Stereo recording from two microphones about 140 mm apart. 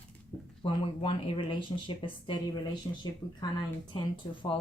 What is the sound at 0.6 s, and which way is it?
Speech, 40° left (ahead or behind).